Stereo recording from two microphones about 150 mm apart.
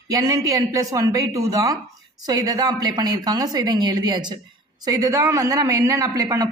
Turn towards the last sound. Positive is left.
turn(degrees=-25)  # may be behind; listen again after turning